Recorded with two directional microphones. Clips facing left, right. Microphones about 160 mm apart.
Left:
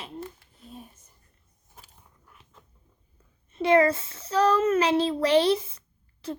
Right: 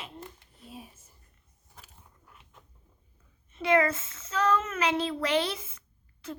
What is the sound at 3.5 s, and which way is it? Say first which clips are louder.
A child's voice: left 5 dB; 35° left (ahead or behind).